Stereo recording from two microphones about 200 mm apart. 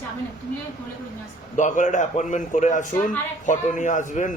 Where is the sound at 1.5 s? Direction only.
40° left (ahead or behind).